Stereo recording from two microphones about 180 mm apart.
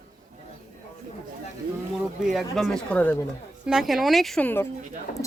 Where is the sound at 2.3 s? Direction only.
Centre (ahead or behind).